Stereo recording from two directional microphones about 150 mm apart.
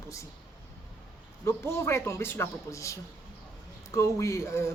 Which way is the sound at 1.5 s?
15° left (ahead or behind).